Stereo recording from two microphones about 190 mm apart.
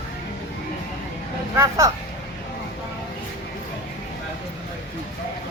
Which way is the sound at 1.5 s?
15° right (ahead or behind).